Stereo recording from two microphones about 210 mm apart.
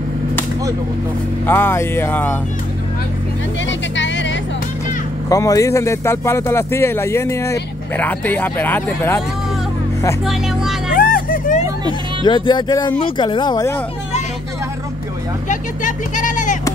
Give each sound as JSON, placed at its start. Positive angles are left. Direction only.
{"t": 1.4, "sound": "speech", "side_deg": 10}
{"t": 3.6, "sound": "vehicle", "side_deg": 60}
{"t": 5.3, "sound": "speech", "side_deg": 15}
{"t": 10.2, "sound": "speech", "side_deg": 0}
{"t": 10.9, "sound": "vehicle", "side_deg": 45}
{"t": 12.2, "sound": "speech", "side_deg": 20}
{"t": 15.4, "sound": "vehicle", "side_deg": 35}